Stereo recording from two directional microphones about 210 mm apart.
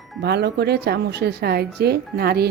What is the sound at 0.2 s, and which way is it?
Speech, 50° right (ahead or behind).